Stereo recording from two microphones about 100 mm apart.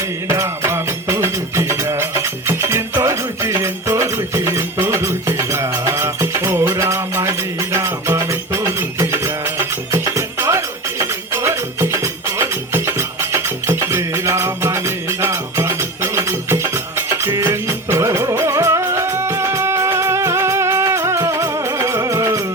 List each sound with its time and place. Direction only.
0.3 s music: 25° right (ahead or behind)
17.1 s music: 25° right (ahead or behind)